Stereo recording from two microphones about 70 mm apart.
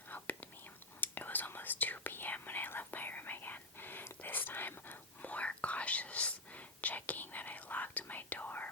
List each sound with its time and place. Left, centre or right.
0.1 s whispering: left